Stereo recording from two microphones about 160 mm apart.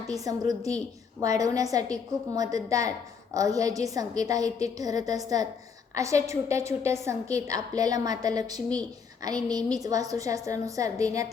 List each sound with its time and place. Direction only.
0.1 s a woman's voice: 20° right (ahead or behind)